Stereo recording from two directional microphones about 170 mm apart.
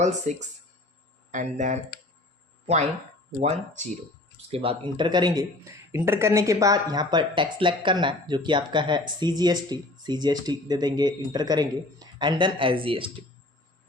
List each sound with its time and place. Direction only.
0.0 s speech: 45° right (ahead or behind)
4.5 s speech: 35° right (ahead or behind)